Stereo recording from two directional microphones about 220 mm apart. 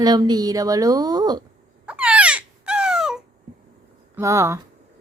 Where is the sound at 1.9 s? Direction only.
5° right (ahead or behind).